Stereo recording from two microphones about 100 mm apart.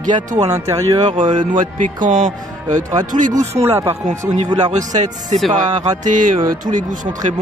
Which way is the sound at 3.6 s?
25° right (ahead or behind).